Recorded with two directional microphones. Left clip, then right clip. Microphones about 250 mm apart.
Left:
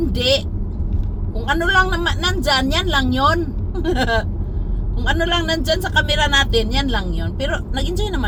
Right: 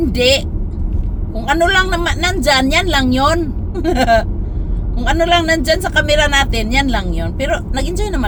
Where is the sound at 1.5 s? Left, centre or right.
Right.